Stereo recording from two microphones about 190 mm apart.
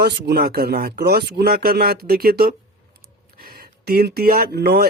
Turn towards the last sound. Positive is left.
turn(degrees=-55)  # may be behind; listen again after turning